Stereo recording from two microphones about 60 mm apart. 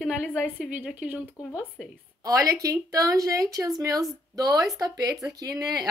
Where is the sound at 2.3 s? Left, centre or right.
Right.